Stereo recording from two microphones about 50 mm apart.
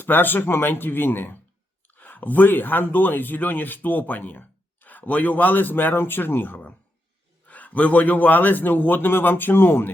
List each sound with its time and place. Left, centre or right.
0.0 s speech: left